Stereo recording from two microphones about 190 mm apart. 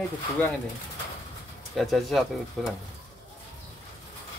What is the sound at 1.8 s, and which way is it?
Speech, centre (ahead or behind).